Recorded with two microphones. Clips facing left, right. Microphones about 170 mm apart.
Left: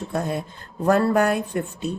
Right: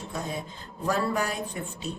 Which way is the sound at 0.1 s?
60° left (ahead or behind).